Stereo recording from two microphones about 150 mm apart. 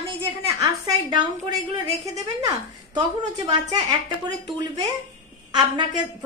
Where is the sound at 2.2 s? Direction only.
25° right (ahead or behind).